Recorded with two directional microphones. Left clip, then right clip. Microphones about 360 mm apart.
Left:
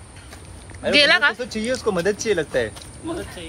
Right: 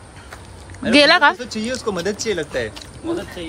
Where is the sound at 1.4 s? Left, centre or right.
Centre.